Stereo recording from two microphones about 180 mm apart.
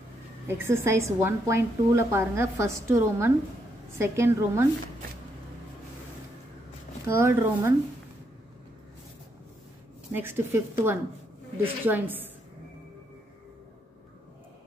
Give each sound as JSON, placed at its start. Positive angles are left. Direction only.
{"t": 0.5, "sound": "a woman's voice", "side_deg": -15}
{"t": 7.1, "sound": "a woman's voice", "side_deg": -15}
{"t": 10.1, "sound": "a woman's voice", "side_deg": -15}